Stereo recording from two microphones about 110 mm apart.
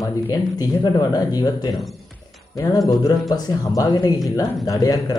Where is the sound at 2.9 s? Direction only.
40° left (ahead or behind).